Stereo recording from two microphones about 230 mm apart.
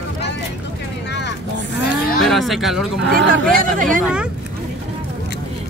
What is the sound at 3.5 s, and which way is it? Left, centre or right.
Speech, right.